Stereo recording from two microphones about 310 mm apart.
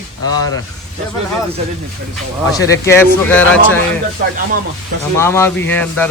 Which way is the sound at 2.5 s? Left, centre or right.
Centre.